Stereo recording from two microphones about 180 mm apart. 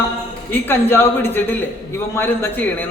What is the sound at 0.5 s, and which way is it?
A man's voice, 10° left (ahead or behind).